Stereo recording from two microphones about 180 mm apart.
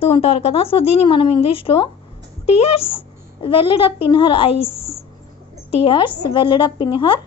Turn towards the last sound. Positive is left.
turn(degrees=30)  # may be behind; listen again after turning